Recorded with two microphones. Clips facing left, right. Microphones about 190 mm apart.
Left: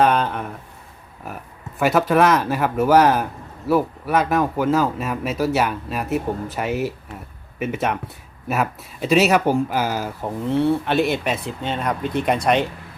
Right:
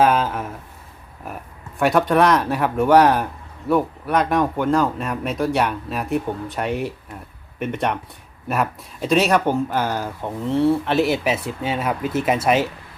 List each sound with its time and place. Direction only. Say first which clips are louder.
0.0 s speech: even; 5° right (ahead or behind)